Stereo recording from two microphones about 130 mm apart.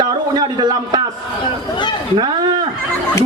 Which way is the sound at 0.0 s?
30° right (ahead or behind).